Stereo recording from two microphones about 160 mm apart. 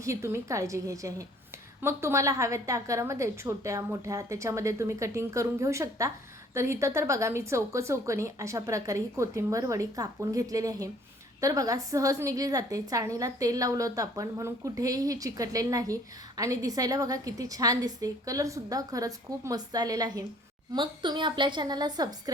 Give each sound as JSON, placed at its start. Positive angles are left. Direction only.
{"t": 0.0, "sound": "a woman's voice", "side_deg": -20}